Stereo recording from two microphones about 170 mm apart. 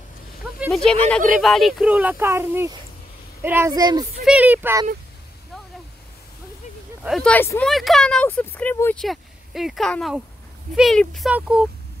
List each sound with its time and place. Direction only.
0.6 s speech: centre (ahead or behind); by 4.0 s 20° right (ahead or behind)
4.2 s speech: 5° right (ahead or behind)
7.0 s speech: centre (ahead or behind)
9.0 s speech: centre (ahead or behind)